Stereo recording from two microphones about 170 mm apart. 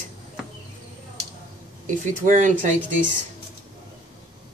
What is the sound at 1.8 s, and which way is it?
Speech, 50° right (ahead or behind).